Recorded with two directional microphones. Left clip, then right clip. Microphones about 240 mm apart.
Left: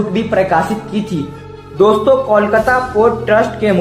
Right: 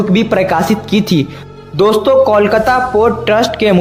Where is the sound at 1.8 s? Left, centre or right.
Right.